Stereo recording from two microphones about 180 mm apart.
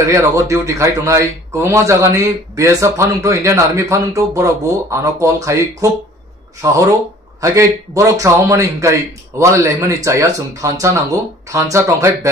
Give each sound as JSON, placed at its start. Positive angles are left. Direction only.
{"t": 0.1, "sound": "speech", "side_deg": -15}